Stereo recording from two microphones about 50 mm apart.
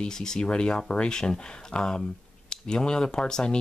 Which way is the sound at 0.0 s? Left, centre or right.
Centre.